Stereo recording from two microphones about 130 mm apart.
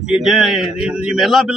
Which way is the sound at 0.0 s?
5° right (ahead or behind).